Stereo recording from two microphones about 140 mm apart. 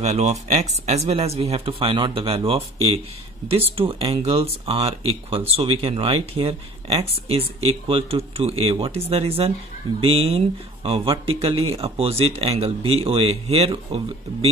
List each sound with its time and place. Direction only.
0.0 s speech: 50° right (ahead or behind)